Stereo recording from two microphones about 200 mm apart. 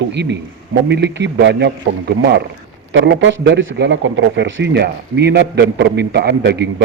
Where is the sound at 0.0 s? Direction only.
60° right (ahead or behind).